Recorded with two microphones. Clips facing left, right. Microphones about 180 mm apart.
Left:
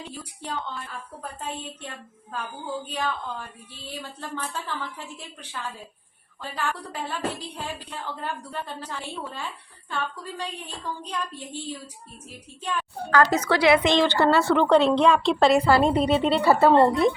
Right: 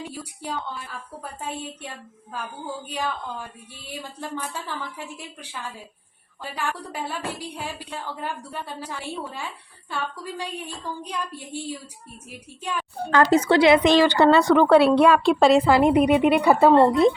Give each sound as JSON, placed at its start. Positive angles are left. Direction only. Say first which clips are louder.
{"t": 0.0, "sound": "a sound", "louder": "right 3 dB", "side_deg": -10}
{"t": 1.4, "sound": "speech", "louder": "right 3 dB", "side_deg": -10}
{"t": 13.1, "sound": "a woman's voice", "louder": "right 3 dB", "side_deg": -25}
{"t": 13.9, "sound": "speech", "louder": "right 4 dB", "side_deg": -10}
{"t": 14.2, "sound": "speech", "louder": "right 4 dB", "side_deg": -20}